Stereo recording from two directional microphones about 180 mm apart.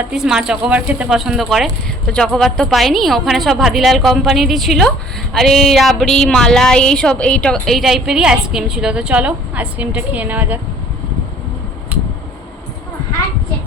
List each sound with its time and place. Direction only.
0.1 s a woman's voice: 5° right (ahead or behind)